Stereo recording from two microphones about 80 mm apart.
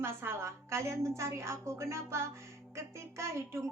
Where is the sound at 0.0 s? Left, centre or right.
Right.